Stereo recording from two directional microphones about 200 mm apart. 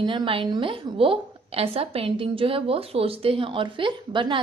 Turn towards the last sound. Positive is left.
turn(degrees=-25)  # may be behind; listen again after turning